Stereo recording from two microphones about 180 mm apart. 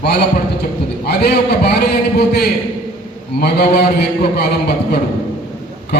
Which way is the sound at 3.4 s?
65° left (ahead or behind).